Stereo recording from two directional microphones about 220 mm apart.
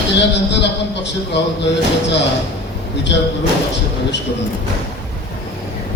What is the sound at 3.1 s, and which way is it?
Speech, 50° left (ahead or behind).